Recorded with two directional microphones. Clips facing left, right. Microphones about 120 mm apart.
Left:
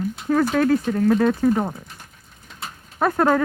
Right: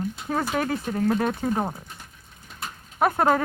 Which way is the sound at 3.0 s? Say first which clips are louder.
Left 2 dB; 20° right (ahead or behind).